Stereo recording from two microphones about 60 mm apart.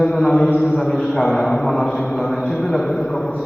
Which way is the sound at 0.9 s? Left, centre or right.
Centre.